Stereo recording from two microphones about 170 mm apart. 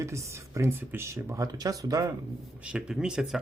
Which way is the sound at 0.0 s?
15° right (ahead or behind).